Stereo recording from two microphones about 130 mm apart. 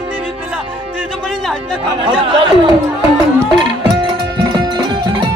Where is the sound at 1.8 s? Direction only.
40° right (ahead or behind).